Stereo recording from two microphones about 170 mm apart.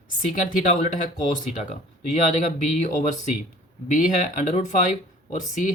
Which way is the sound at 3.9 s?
50° left (ahead or behind).